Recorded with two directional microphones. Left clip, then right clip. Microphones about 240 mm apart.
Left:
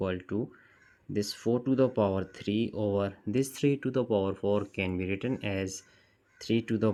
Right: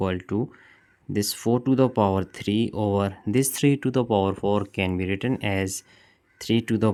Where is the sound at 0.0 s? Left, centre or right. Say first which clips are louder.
Right 6 dB; right.